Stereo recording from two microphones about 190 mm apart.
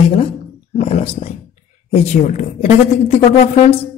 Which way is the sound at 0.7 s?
35° left (ahead or behind).